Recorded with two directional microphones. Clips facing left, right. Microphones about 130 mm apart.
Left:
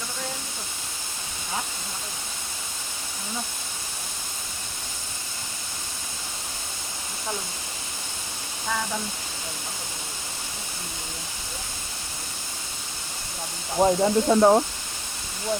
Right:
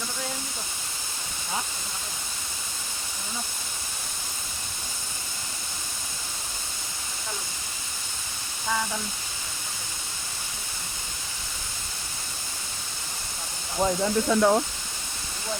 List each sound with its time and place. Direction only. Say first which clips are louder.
13.7 s speech: left 4 dB; 30° left (ahead or behind)